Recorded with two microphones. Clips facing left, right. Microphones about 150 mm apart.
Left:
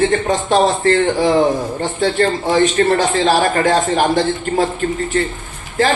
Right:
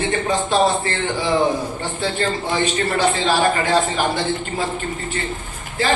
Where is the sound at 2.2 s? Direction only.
50° left (ahead or behind).